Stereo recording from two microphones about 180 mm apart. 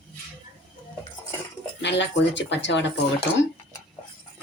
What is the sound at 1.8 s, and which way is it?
Speech, 80° left.